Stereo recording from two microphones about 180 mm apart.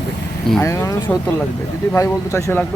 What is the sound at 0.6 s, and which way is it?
Speech, 15° left (ahead or behind).